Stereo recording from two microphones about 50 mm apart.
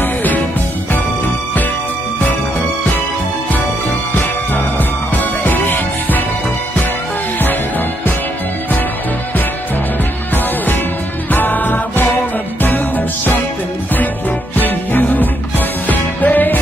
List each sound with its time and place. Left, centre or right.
0.0 s music: left
5.1 s music: left
11.3 s music: left
14.6 s music: left